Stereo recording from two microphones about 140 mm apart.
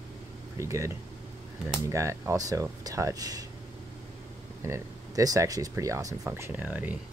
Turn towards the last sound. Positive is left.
turn(degrees=-10)  # may be behind; listen again after turning